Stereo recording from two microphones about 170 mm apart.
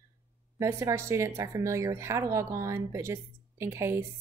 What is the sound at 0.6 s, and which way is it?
Speech, 15° right (ahead or behind).